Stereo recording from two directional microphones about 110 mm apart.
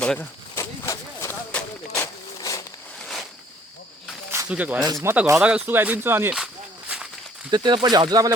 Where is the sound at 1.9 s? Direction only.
35° left (ahead or behind).